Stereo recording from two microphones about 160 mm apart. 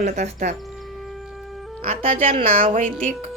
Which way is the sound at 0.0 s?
50° right (ahead or behind).